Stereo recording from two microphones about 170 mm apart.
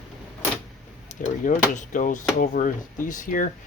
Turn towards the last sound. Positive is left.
turn(degrees=50)  # may be behind; listen again after turning